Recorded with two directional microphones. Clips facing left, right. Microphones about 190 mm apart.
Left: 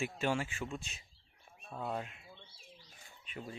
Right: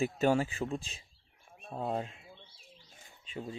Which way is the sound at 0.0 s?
40° right (ahead or behind).